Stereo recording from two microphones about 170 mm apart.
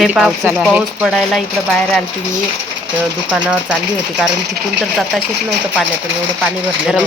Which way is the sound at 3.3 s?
10° right (ahead or behind).